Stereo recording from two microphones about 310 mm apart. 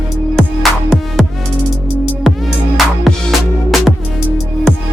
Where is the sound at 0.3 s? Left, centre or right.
Centre.